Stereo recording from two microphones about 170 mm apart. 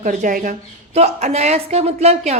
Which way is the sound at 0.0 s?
50° right (ahead or behind).